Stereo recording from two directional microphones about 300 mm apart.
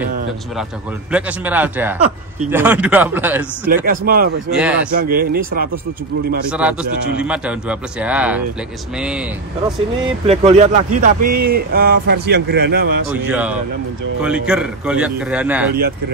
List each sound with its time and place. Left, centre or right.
1.1 s a man's voice: centre
3.6 s speech: right
4.5 s a man's voice: centre
5.0 s speech: right
6.5 s a man's voice: centre
10.2 s a man's voice: right
13.3 s a man's voice: centre